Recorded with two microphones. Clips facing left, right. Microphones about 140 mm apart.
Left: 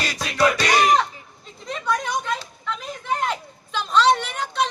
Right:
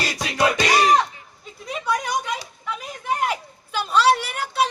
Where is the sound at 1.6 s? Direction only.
10° right (ahead or behind).